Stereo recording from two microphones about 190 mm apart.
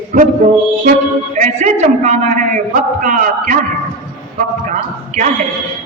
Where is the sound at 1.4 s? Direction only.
40° right (ahead or behind).